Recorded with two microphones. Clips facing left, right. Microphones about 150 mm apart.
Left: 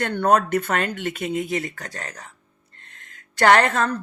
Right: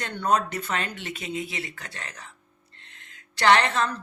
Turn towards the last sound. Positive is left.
turn(degrees=50)  # may be behind; listen again after turning